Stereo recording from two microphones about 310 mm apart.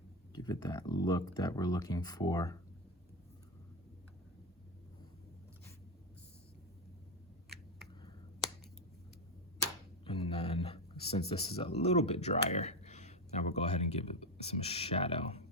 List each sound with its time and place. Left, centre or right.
0.3 s speech: centre
10.0 s speech: centre